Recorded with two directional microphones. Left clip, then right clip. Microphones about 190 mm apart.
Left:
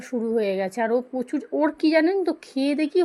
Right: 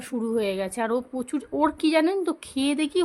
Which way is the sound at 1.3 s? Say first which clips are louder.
Right 3 dB; 5° right (ahead or behind).